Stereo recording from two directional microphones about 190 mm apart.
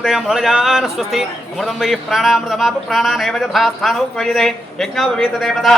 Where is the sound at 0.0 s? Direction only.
Centre (ahead or behind).